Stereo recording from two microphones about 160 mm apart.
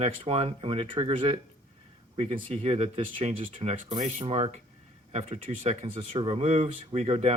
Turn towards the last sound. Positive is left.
turn(degrees=-40)  # may be behind; listen again after turning